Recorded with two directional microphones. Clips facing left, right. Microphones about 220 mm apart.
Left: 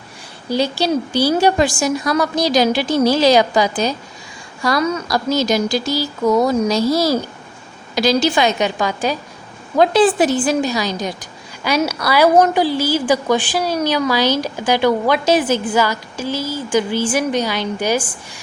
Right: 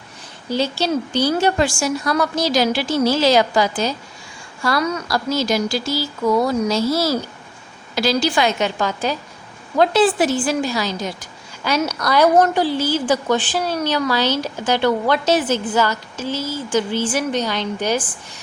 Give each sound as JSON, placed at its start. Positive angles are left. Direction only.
{"t": 0.4, "sound": "speech", "side_deg": 15}